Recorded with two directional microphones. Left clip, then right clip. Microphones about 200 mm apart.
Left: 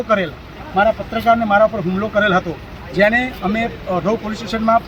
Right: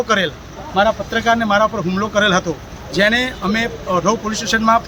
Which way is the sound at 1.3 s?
15° right (ahead or behind).